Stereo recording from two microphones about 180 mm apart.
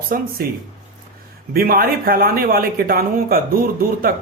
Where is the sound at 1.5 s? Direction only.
55° right (ahead or behind).